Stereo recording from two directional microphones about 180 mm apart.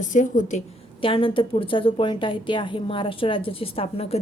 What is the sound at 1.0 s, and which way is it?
A woman's voice, 30° left (ahead or behind).